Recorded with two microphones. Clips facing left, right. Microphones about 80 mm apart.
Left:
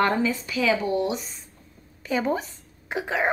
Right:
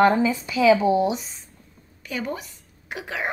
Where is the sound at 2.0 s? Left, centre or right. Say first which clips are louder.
Left 5 dB; left.